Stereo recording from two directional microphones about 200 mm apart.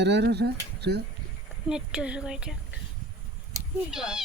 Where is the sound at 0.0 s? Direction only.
55° right (ahead or behind).